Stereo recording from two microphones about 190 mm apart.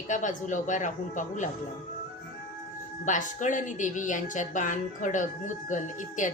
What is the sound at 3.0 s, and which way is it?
A woman's voice, 40° left (ahead or behind).